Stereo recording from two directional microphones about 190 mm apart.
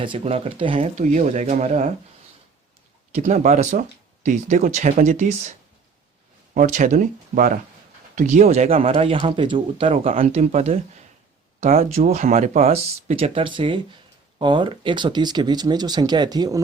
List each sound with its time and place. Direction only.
0.0 s speech: 30° right (ahead or behind)
3.1 s speech: 35° right (ahead or behind); by 16.6 s 20° right (ahead or behind)